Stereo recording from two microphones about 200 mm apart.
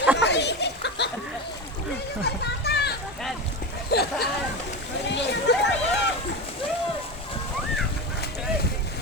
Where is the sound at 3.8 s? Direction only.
55° left (ahead or behind).